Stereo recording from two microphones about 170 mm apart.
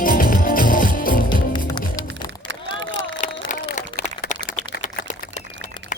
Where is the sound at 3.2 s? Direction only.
50° left (ahead or behind).